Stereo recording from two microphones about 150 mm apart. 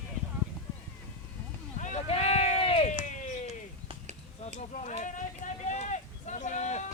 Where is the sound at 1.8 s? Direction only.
50° left (ahead or behind).